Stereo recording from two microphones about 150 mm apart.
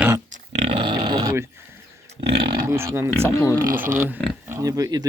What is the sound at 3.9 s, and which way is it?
Speech, 10° right (ahead or behind).